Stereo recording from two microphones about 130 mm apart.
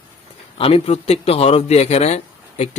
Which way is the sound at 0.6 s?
50° left (ahead or behind).